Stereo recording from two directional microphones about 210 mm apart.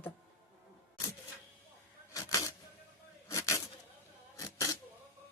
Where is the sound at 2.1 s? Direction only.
15° left (ahead or behind).